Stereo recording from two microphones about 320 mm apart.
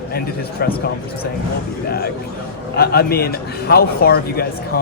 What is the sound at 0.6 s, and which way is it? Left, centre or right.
Speech, left.